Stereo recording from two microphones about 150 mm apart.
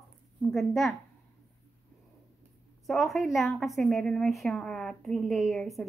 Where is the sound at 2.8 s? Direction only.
Centre (ahead or behind).